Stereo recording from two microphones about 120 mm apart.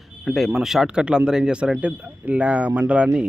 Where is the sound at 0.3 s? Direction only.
Centre (ahead or behind).